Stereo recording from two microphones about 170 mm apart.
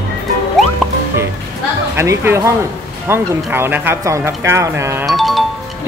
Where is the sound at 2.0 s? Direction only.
15° right (ahead or behind).